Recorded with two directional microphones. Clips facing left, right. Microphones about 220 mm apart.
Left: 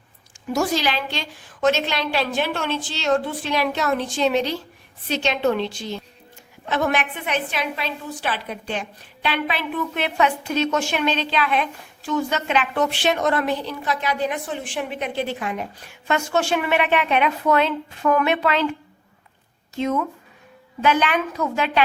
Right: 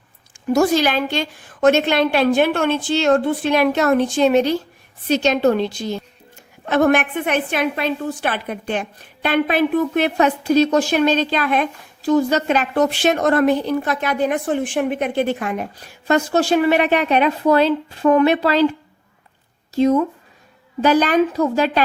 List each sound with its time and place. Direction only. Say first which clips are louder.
0.5 s a woman's voice: right 6 dB; 50° right (ahead or behind); by 18.7 s 35° right (ahead or behind)
19.7 s a woman's voice: right 8 dB; 35° right (ahead or behind)